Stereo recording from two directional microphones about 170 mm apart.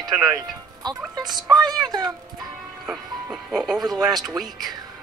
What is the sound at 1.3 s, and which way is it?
Speech, 25° right (ahead or behind).